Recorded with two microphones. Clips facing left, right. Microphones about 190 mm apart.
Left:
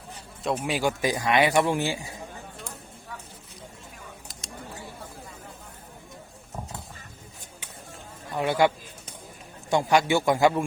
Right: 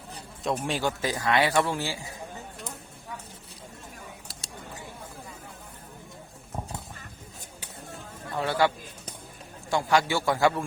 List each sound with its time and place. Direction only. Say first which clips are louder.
0.4 s speech: left 2 dB; centre (ahead or behind); by 2.1 s 20° left (ahead or behind)
8.3 s a man's voice: left 3 dB; 15° left (ahead or behind)